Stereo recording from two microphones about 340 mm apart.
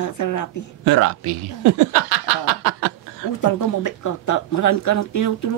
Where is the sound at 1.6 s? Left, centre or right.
Right.